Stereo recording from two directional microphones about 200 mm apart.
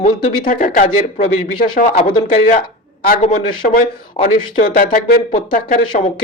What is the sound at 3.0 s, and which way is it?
A man's voice, 40° left (ahead or behind).